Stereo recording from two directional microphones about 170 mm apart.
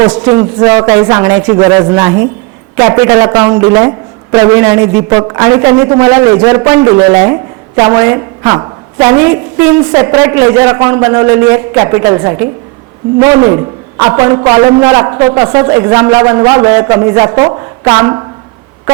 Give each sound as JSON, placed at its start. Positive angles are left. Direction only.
{"t": 0.0, "sound": "a man's voice", "side_deg": -25}